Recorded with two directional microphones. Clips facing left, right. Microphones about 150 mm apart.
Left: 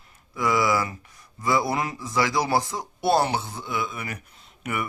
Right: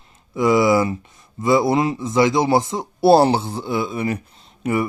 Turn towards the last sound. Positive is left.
turn(degrees=-30)  # may be behind; listen again after turning